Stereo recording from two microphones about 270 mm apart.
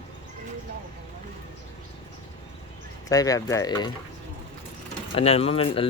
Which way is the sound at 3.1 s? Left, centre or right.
Centre.